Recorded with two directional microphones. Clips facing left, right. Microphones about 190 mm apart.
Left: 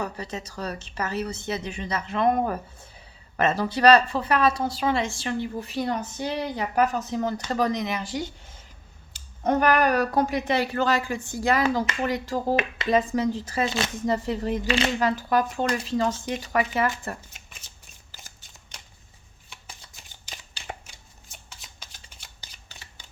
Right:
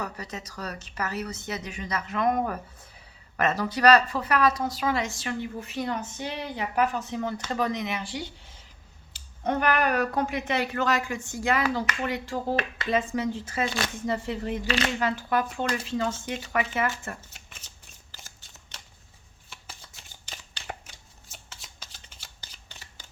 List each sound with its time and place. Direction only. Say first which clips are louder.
0.0 s speech: left 4 dB; 30° left (ahead or behind)
13.7 s speech: left 2 dB; 20° left (ahead or behind)
13.9 s speech: left 4 dB; 40° left (ahead or behind)
20.0 s shuffling cards: even; 10° left (ahead or behind)